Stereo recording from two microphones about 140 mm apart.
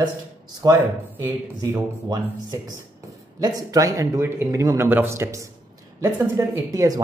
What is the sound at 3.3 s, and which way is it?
Speech, 25° right (ahead or behind).